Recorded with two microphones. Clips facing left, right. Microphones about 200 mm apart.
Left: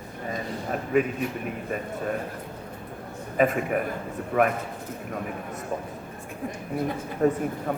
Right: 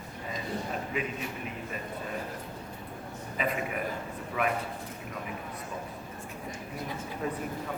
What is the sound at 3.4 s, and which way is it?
A man's voice, 50° left (ahead or behind).